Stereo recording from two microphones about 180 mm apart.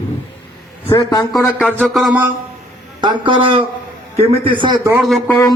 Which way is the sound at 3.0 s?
25° right (ahead or behind).